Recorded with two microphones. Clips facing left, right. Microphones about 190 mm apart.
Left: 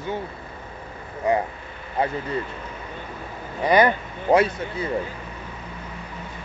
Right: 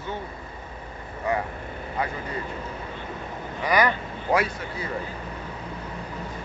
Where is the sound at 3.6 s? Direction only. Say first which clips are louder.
Left 5 dB; 25° left (ahead or behind).